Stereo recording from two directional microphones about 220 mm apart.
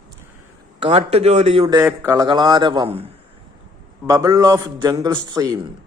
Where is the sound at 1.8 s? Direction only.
10° right (ahead or behind).